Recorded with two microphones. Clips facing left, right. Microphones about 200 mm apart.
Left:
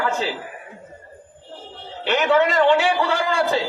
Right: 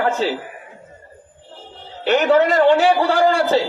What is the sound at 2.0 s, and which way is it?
A man's voice, 35° right (ahead or behind).